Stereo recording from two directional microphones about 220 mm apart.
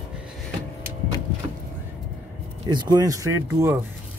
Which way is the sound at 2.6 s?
20° right (ahead or behind).